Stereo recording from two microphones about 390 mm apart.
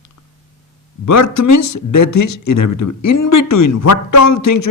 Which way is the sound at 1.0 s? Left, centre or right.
Left.